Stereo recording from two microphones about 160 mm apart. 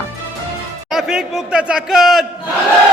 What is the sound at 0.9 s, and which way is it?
A man's voice, 5° right (ahead or behind).